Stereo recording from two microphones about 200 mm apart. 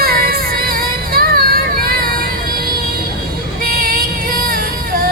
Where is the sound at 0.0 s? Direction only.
50° right (ahead or behind).